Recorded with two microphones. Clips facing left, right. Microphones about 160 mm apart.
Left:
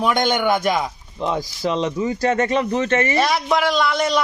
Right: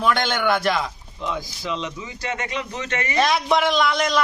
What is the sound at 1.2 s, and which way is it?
A man's voice, 40° left (ahead or behind).